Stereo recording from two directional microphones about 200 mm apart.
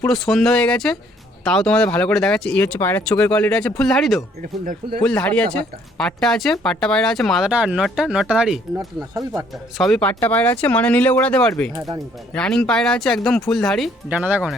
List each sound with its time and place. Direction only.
0.0 s speech: centre (ahead or behind)
4.6 s speech: 40° right (ahead or behind)
5.0 s speech: 5° left (ahead or behind)
9.7 s speech: centre (ahead or behind)